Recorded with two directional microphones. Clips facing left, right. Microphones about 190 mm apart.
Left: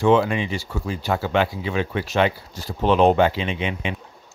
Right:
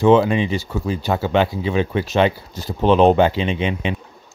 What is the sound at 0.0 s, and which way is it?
Speech, 20° right (ahead or behind).